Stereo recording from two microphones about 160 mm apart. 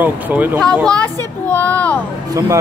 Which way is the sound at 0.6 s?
5° left (ahead or behind).